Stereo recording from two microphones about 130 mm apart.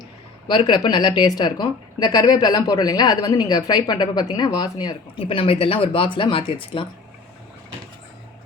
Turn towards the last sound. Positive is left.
turn(degrees=40)  # may be behind; listen again after turning